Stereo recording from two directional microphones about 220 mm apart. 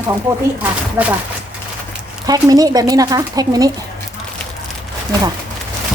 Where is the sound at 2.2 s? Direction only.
15° right (ahead or behind).